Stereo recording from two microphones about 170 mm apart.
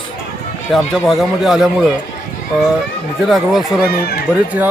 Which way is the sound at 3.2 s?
Centre (ahead or behind).